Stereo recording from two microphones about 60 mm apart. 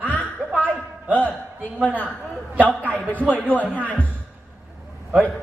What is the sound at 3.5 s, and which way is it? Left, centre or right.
Speech, left.